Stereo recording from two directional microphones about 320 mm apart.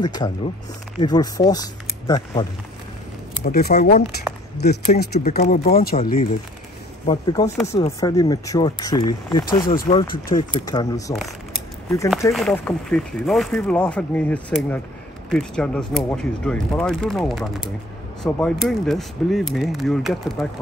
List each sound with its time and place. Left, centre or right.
0.0 s speech: centre
3.4 s speech: left
7.1 s speech: centre
11.1 s a sound: centre
12.2 s speech: centre